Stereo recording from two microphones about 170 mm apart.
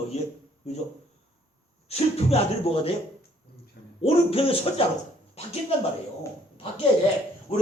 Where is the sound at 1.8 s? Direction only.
35° left (ahead or behind).